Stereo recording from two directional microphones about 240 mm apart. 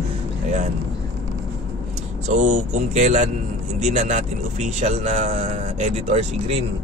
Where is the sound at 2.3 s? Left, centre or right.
Right.